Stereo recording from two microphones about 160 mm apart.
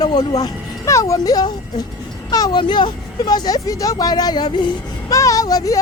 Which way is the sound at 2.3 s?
25° left (ahead or behind).